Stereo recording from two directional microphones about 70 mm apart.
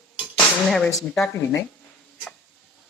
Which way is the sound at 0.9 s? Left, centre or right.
Centre.